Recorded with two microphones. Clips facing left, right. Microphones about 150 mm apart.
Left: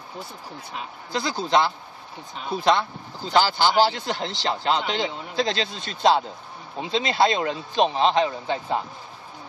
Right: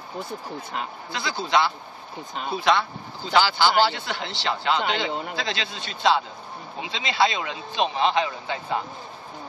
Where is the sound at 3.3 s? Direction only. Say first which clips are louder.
Even; 40° left (ahead or behind).